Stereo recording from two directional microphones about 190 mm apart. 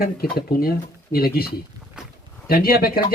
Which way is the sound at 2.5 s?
50° left (ahead or behind).